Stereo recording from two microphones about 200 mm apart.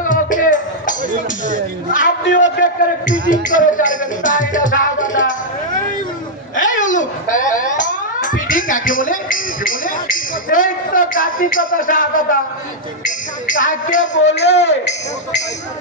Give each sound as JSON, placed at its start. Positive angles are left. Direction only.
{"t": 0.0, "sound": "music", "side_deg": 40}
{"t": 1.9, "sound": "a sound", "side_deg": 40}
{"t": 2.3, "sound": "a man's voice", "side_deg": 40}
{"t": 6.5, "sound": "a man's voice", "side_deg": 40}
{"t": 14.3, "sound": "a man's voice", "side_deg": 60}
{"t": 14.7, "sound": "a man's voice", "side_deg": 35}